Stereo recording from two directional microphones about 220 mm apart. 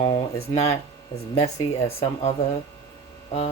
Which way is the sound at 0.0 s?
30° left (ahead or behind).